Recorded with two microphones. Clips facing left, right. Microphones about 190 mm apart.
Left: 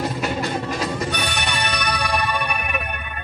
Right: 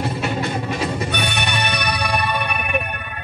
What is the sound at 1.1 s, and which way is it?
Music, 60° right (ahead or behind).